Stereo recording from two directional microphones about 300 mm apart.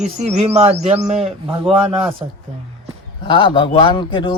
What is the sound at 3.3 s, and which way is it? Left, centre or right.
Speech, centre.